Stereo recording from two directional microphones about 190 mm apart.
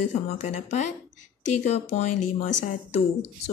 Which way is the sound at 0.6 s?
40° left (ahead or behind).